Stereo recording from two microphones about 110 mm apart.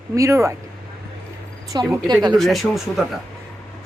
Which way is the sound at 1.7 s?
40° right (ahead or behind).